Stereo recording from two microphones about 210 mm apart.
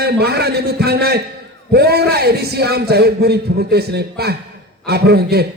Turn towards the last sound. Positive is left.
turn(degrees=-50)  # may be behind; listen again after turning